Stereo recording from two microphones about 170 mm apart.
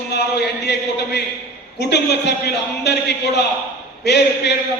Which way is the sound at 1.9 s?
80° left.